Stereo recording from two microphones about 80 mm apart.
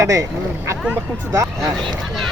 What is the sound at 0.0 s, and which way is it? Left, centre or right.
Speech, right.